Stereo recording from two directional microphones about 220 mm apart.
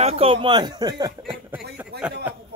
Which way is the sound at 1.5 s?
10° right (ahead or behind).